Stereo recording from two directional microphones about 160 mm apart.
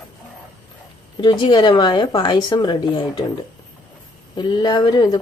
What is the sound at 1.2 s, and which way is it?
A woman's voice, 30° left (ahead or behind).